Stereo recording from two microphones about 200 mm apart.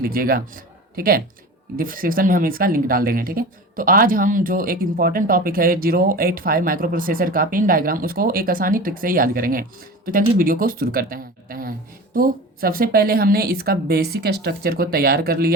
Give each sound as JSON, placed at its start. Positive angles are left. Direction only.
{"t": 0.0, "sound": "speech", "side_deg": -45}